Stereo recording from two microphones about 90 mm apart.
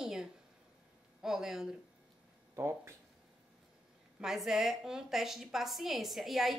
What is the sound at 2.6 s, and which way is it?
Speech, 30° right (ahead or behind).